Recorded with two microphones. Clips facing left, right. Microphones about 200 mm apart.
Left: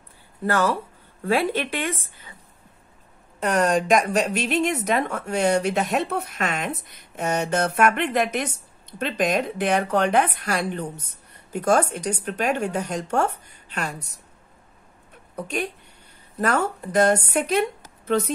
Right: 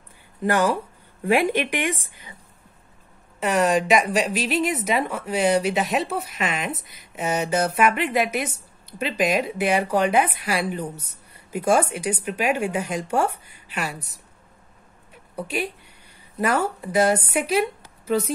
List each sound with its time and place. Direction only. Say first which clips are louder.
0.4 s speech: right 1 dB; 15° right (ahead or behind)
3.3 s a woman's voice: right 1 dB; 5° right (ahead or behind)
15.3 s speech: even; 5° right (ahead or behind)